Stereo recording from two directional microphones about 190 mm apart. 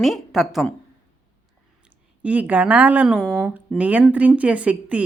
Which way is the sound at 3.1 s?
5° left (ahead or behind).